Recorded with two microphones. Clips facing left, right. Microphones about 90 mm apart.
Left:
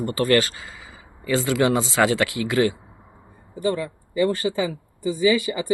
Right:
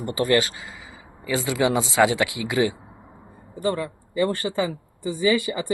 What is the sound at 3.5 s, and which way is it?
Speech, 35° right (ahead or behind).